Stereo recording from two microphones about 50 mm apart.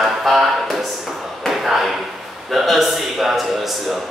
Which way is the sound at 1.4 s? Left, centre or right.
Centre.